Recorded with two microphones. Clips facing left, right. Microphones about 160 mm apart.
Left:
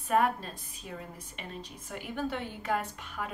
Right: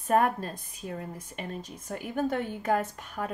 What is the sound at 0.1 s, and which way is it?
A woman's voice, 45° right (ahead or behind).